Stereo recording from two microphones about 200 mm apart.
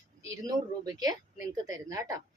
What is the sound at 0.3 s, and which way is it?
Speech, 20° right (ahead or behind).